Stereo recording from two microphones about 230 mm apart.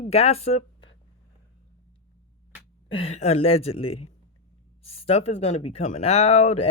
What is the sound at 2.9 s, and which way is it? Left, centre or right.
Speech, left.